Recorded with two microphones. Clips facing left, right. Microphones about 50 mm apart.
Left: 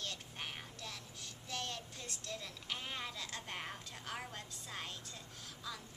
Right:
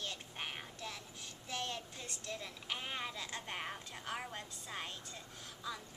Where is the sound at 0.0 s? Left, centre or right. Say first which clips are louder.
Right 1 dB; centre.